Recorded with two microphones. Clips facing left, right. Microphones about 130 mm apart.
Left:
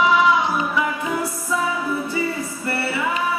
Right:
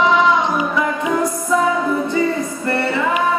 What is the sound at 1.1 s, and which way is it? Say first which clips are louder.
Music: right 6 dB; 50° right (ahead or behind).